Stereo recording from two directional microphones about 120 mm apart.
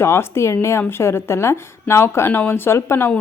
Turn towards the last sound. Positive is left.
turn(degrees=20)  # may be behind; listen again after turning